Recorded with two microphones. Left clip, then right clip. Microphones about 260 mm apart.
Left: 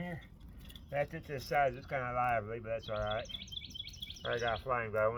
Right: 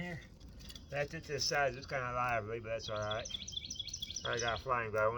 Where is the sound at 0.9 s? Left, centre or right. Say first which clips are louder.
Left 2 dB; centre.